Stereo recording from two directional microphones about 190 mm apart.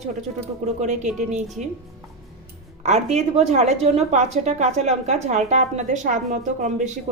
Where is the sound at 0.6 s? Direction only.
35° right (ahead or behind).